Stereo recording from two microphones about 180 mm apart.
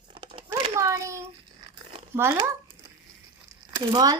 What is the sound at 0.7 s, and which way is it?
Child singing, 15° right (ahead or behind).